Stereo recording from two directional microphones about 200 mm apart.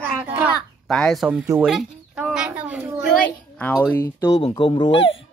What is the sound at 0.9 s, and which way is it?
Speech, centre (ahead or behind).